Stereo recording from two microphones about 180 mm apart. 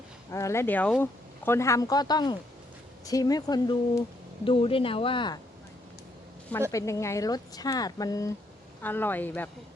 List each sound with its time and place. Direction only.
0.3 s speech: 15° left (ahead or behind)
6.7 s speech: 20° left (ahead or behind)